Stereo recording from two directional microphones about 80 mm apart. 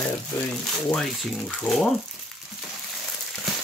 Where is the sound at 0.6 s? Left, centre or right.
Centre.